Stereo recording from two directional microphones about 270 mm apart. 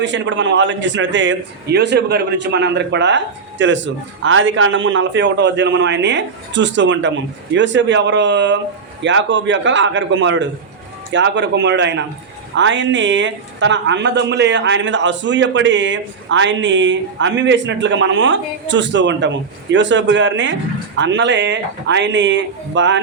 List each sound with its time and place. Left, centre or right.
0.0 s a man's voice: right